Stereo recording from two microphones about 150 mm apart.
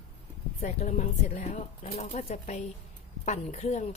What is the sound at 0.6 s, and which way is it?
Speech, 55° left (ahead or behind).